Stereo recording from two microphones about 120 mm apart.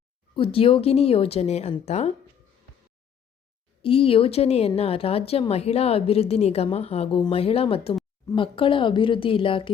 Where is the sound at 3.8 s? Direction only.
50° left (ahead or behind).